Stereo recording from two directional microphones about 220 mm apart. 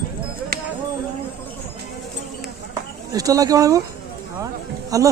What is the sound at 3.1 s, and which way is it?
Speech, 15° right (ahead or behind).